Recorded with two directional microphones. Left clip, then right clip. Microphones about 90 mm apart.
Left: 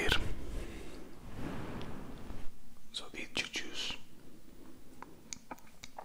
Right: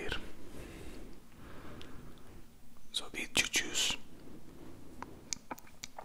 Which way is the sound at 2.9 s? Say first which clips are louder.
Right 4 dB; 20° right (ahead or behind).